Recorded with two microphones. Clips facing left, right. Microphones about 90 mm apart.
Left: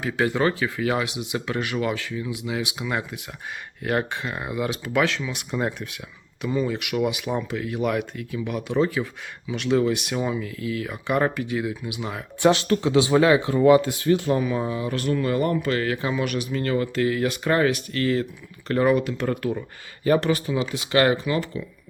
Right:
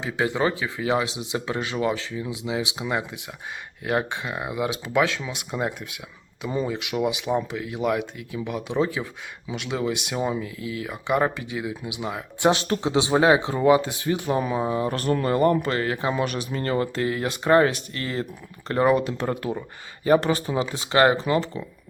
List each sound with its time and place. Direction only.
0.0 s speech: 20° right (ahead or behind)
14.8 s speech: 40° right (ahead or behind)